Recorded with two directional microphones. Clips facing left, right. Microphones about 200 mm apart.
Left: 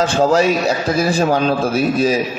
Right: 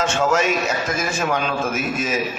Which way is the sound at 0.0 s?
35° left (ahead or behind).